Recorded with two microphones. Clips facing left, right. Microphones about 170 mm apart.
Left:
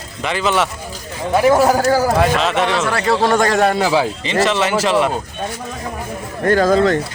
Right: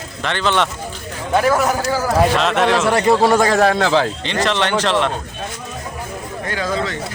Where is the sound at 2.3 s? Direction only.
Centre (ahead or behind).